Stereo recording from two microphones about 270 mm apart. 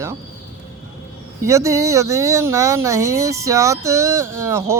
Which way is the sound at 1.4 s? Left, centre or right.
Centre.